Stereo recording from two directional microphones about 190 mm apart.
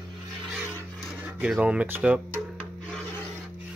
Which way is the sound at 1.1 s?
5° right (ahead or behind).